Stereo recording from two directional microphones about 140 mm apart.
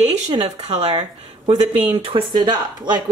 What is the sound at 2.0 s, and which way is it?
A woman's voice, 35° right (ahead or behind).